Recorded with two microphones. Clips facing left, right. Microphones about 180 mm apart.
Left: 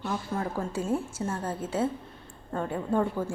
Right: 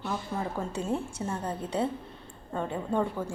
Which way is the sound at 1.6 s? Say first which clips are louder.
Left 2 dB; 5° left (ahead or behind).